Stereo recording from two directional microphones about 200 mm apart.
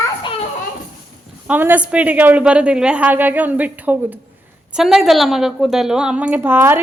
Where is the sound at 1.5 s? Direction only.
10° right (ahead or behind).